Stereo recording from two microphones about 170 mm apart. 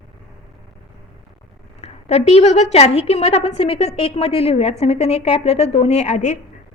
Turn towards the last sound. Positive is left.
turn(degrees=45)  # may be behind; listen again after turning